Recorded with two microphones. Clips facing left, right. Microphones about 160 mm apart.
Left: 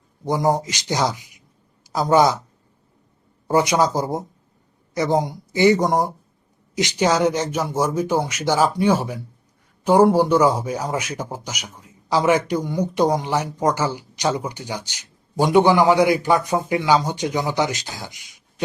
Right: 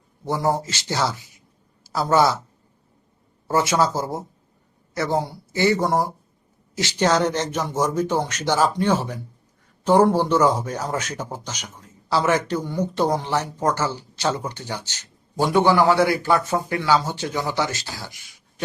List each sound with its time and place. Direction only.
0.3 s a man's voice: 15° left (ahead or behind)
3.4 s speech: 15° left (ahead or behind)